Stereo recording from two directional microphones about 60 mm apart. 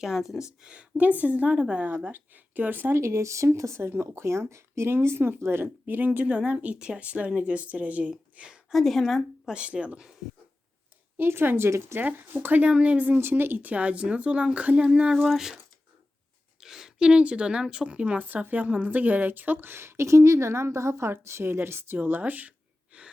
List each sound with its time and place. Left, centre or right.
0.0 s speech: centre
0.6 s speech: centre
2.1 s a woman's voice: right
3.0 s speech: right
5.6 s speech: right
8.4 s a woman's voice: centre
8.7 s speech: centre
9.5 s speech: centre
11.2 s a woman's voice: right
11.7 s speech: right
11.9 s speech: right
13.1 s speech: right; by 15.5 s centre
16.6 s a woman's voice: centre; by 21.9 s right
21.9 s a sound: right